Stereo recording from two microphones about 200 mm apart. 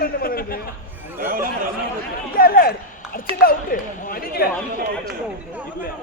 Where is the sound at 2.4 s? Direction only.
50° left (ahead or behind).